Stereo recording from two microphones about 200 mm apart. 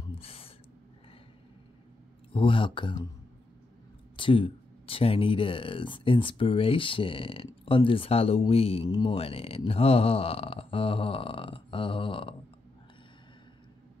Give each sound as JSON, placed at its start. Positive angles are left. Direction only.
{"t": 0.1, "sound": "gasp", "side_deg": 30}
{"t": 2.3, "sound": "speech", "side_deg": 25}
{"t": 4.2, "sound": "speech", "side_deg": 25}